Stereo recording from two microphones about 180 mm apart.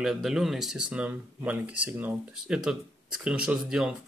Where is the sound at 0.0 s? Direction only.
Centre (ahead or behind).